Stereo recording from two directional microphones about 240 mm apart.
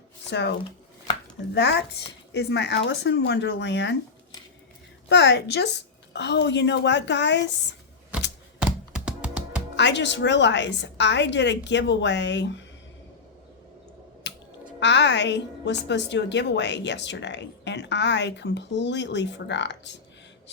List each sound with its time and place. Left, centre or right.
0.3 s a woman's voice: left
1.5 s a woman's voice: left
5.0 s a woman's voice: left
8.5 s typing: centre
9.7 s a woman's voice: left
14.3 s a sound: left
14.8 s a woman's voice: left